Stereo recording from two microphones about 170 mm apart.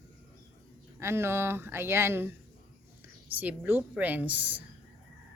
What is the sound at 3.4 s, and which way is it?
Speech, 10° right (ahead or behind).